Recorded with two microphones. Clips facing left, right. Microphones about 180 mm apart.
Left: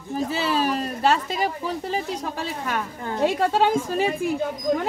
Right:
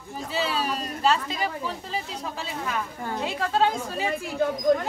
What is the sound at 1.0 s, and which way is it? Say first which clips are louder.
Speech: left 2 dB; 50° left (ahead or behind).